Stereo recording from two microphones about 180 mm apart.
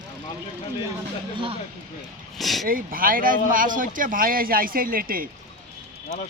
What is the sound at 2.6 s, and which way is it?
Speech, 50° right (ahead or behind).